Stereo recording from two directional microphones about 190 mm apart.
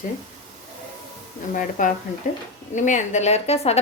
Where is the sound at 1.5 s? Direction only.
45° left (ahead or behind).